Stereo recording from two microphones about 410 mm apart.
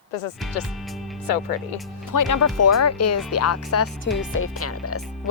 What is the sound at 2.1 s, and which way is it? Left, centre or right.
Speech, left.